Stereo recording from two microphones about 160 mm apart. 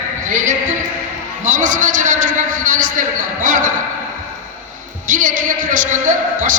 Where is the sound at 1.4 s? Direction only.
55° right (ahead or behind).